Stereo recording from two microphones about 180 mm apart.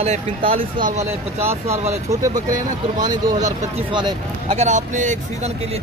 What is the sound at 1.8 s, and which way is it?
Speech, 15° right (ahead or behind).